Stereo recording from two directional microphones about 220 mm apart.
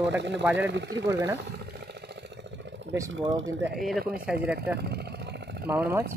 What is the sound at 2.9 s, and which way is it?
Speech, 15° right (ahead or behind).